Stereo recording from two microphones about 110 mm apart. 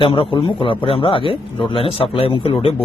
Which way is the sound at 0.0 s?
50° left (ahead or behind).